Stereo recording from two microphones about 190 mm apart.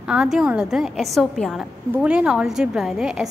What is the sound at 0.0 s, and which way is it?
A woman's voice, 5° right (ahead or behind).